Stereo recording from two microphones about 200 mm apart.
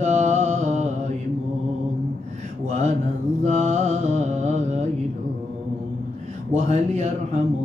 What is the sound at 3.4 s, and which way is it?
Mantra, 35° right (ahead or behind).